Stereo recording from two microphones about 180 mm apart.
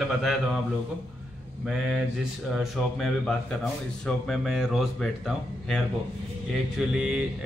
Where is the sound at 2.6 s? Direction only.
Centre (ahead or behind).